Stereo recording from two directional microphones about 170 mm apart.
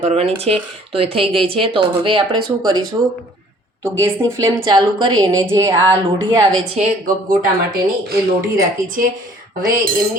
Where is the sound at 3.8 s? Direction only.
15° right (ahead or behind).